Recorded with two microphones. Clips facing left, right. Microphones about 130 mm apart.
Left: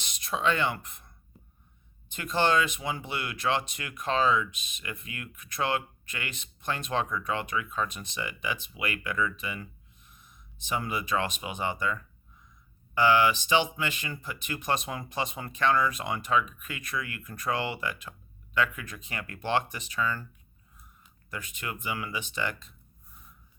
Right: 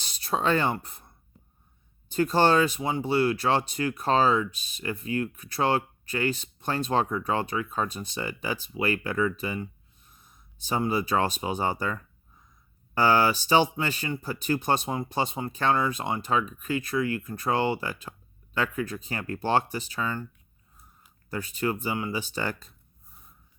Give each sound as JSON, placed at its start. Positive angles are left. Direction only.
{"t": 0.0, "sound": "speech", "side_deg": -35}
{"t": 21.2, "sound": "speech", "side_deg": -35}